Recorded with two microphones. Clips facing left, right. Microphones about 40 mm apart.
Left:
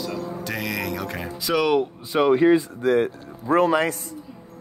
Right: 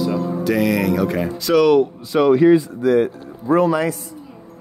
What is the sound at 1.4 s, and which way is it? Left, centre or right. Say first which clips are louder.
Speech: right 6 dB; centre.